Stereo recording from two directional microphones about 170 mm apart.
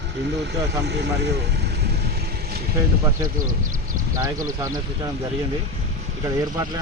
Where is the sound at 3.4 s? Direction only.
50° right (ahead or behind).